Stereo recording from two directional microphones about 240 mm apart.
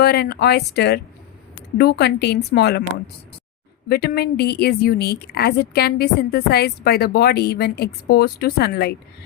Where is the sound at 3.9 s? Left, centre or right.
Left.